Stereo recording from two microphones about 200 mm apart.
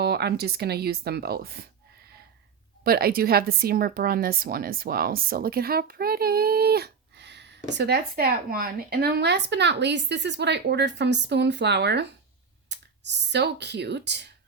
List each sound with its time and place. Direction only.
0.0 s a woman's voice: 55° right (ahead or behind)
2.8 s a woman's voice: 50° right (ahead or behind)